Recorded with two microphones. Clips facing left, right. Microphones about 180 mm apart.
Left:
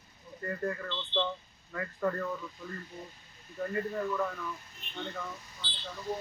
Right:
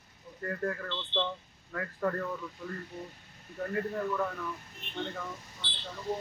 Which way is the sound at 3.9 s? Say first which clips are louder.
Even; 5° right (ahead or behind).